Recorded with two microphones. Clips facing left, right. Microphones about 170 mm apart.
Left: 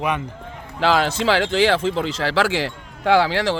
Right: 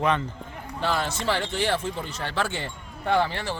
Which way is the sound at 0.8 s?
90° left.